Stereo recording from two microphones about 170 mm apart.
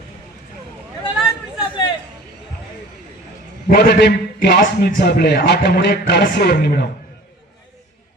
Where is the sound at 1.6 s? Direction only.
25° left (ahead or behind).